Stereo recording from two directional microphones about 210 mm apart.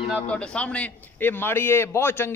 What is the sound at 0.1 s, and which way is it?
A man's voice, 5° left (ahead or behind).